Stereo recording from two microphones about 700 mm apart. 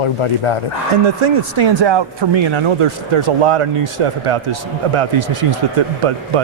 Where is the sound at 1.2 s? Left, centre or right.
Right.